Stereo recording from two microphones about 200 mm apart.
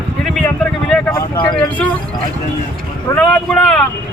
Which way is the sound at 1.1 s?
20° left (ahead or behind).